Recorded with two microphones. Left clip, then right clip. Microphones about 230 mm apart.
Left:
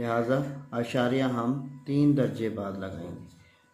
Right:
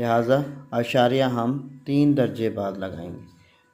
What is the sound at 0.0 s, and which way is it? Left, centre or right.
Speech, right.